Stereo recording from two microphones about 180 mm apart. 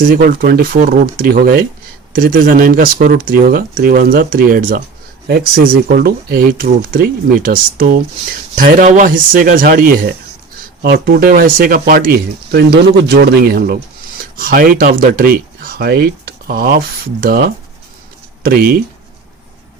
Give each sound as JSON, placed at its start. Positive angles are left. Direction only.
{"t": 0.0, "sound": "speech", "side_deg": -50}